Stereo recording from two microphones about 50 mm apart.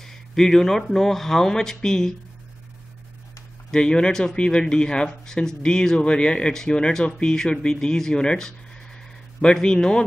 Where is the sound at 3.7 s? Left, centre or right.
Centre.